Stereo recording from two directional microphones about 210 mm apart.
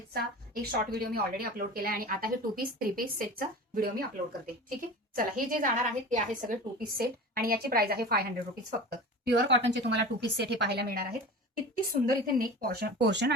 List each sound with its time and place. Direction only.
0.1 s a woman's voice: 45° right (ahead or behind)
5.1 s a woman's voice: 40° right (ahead or behind); by 13.3 s 55° right (ahead or behind)